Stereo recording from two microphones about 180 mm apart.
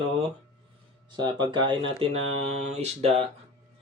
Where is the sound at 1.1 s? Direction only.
25° right (ahead or behind).